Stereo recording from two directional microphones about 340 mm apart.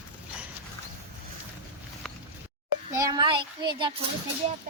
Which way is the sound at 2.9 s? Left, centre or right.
Centre.